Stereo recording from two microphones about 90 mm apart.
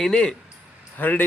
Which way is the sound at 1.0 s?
20° left (ahead or behind).